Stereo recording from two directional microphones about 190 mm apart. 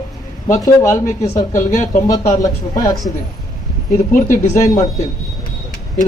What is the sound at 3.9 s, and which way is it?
Speech, 40° left (ahead or behind).